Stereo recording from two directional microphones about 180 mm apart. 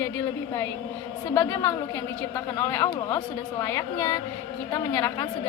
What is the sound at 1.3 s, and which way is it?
A woman's voice, 15° left (ahead or behind).